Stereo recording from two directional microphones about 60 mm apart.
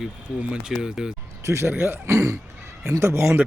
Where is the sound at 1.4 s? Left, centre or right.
Right.